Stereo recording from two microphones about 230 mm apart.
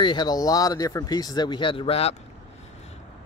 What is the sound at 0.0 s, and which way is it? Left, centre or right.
Speech, centre.